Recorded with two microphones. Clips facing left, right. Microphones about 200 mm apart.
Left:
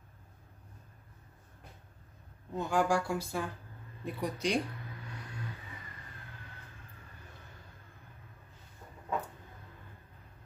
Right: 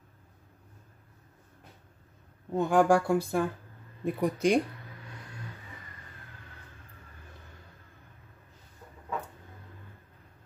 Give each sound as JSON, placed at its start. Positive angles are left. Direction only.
{"t": 2.5, "sound": "speech", "side_deg": -55}